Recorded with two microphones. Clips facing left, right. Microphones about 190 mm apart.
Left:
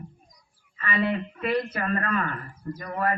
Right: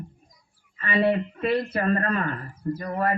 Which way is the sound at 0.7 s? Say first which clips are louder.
Right 4 dB; 30° right (ahead or behind).